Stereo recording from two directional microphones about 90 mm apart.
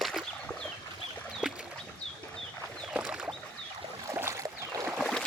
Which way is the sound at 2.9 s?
10° right (ahead or behind).